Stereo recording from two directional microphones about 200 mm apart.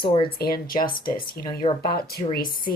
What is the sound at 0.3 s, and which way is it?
A woman's voice, 50° left (ahead or behind).